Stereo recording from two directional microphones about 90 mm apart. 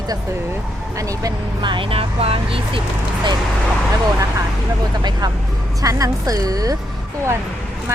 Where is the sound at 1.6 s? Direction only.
65° right (ahead or behind); by 2.8 s 90° right.